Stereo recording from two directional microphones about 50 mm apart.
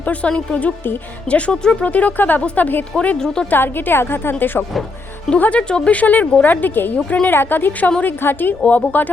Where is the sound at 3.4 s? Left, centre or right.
Left.